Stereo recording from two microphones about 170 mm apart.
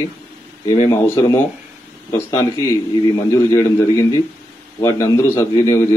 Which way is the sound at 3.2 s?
20° left (ahead or behind).